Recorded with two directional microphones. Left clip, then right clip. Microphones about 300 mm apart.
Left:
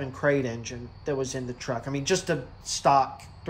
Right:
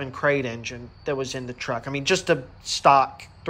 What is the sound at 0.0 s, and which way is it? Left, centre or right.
Speech, centre.